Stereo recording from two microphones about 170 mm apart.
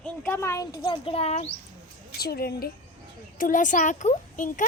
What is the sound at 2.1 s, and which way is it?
Speech, 65° left (ahead or behind).